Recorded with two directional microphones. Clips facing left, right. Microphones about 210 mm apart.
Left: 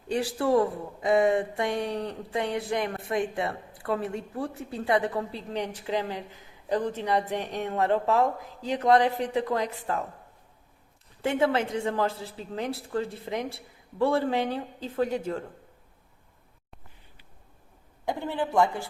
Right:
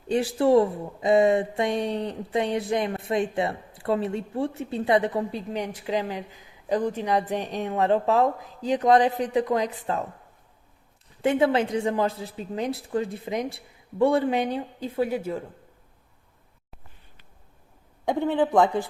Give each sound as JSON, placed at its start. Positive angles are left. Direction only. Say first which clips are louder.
{"t": 0.1, "sound": "speech", "louder": "right 5 dB", "side_deg": -20}
{"t": 11.2, "sound": "speech", "louder": "right 3 dB", "side_deg": -20}
{"t": 18.1, "sound": "speech", "louder": "right 6 dB", "side_deg": -20}